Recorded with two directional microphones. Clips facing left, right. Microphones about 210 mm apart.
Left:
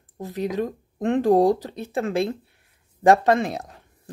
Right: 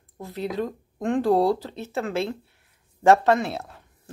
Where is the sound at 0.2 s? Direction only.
15° left (ahead or behind).